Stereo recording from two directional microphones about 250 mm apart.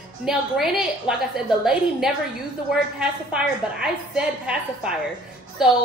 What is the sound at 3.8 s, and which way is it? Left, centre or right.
A woman's voice, centre.